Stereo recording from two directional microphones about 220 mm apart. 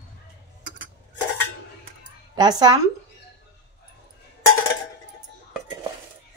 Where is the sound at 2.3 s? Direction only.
20° right (ahead or behind).